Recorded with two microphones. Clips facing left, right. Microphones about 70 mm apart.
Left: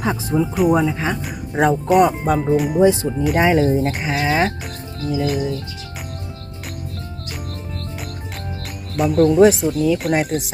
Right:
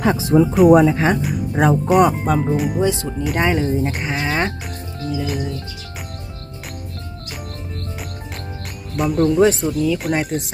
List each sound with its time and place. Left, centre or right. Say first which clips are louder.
0.0 s speech: right 5 dB; right
0.8 s speech: right 5 dB; right
1.2 s speech: right 1 dB; centre
2.8 s speech: left 5 dB; centre
3.2 s speech: left 3 dB; centre
9.0 s speech: left 3 dB; centre